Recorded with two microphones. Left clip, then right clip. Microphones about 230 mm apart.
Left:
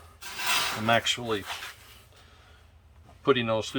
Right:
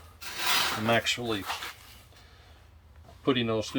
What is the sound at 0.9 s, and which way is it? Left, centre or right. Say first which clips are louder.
Speech: left 4 dB; centre.